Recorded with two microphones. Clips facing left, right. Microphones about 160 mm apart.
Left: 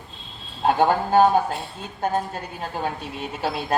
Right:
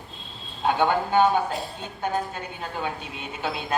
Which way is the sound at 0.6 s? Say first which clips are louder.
Left 3 dB; 40° left (ahead or behind).